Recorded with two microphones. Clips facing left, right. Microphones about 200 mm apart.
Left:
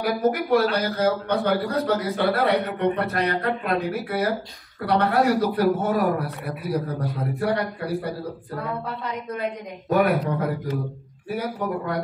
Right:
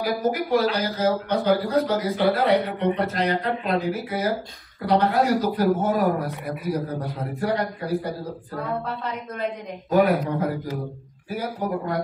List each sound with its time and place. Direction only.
0.0 s a man's voice: 65° left (ahead or behind)
7.3 s a man's voice: 65° left (ahead or behind)
9.8 s a man's voice: 65° left (ahead or behind)
11.2 s a man's voice: 65° left (ahead or behind)